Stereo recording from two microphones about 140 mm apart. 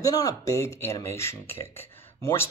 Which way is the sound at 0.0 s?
25° left (ahead or behind).